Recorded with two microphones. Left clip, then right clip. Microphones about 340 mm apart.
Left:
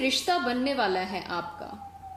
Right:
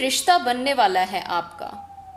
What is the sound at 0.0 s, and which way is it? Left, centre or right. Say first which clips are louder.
A woman's voice: right 7 dB; right.